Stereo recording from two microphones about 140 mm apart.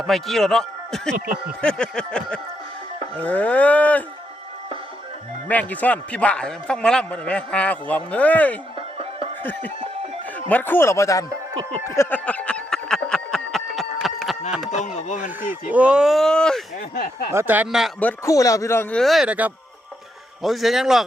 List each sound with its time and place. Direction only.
0.0 s a man's voice: centre (ahead or behind)
5.5 s a man's voice: 10° left (ahead or behind)
11.9 s a sound: 15° left (ahead or behind); by 14.3 s centre (ahead or behind)
14.8 s speech: 60° left (ahead or behind)
15.7 s speech: 10° right (ahead or behind)
16.9 s speech: 90° left
17.3 s speech: 15° right (ahead or behind)
18.3 s speech: 25° left (ahead or behind)
18.9 s speech: centre (ahead or behind)